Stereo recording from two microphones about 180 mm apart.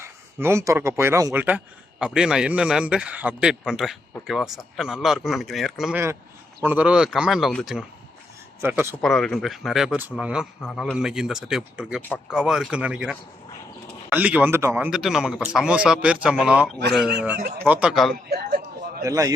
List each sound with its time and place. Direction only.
0.0 s speech: 15° right (ahead or behind)
8.6 s speech: 10° right (ahead or behind)
9.0 s speech: 5° left (ahead or behind)
10.6 s a man's voice: 5° left (ahead or behind); by 14.8 s 15° right (ahead or behind)
14.8 s speech: centre (ahead or behind)
18.3 s a sound: 60° right (ahead or behind)
19.0 s a man's voice: 20° right (ahead or behind)